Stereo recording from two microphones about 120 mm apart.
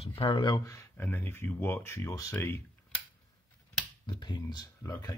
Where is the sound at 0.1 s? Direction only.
40° left (ahead or behind).